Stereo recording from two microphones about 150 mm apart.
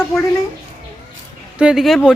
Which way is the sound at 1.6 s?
5° right (ahead or behind).